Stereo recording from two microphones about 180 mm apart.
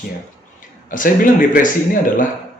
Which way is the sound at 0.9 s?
50° left (ahead or behind).